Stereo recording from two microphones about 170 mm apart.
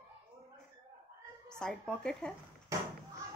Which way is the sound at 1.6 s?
5° left (ahead or behind).